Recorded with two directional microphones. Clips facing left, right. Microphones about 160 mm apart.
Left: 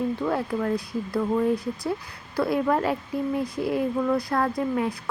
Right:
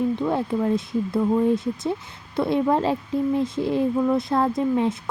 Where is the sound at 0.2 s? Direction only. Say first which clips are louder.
Right 3 dB; 20° right (ahead or behind).